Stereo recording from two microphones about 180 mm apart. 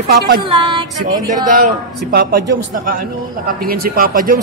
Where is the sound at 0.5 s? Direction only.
25° right (ahead or behind).